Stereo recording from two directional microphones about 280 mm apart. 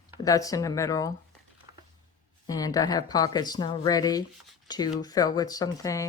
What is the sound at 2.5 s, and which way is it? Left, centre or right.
Speech, centre.